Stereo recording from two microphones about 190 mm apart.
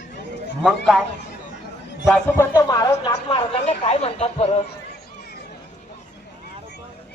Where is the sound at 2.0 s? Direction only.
5° left (ahead or behind).